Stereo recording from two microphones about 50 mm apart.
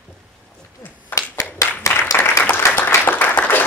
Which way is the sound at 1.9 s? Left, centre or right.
Left.